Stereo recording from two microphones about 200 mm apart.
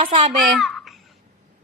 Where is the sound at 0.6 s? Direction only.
Centre (ahead or behind).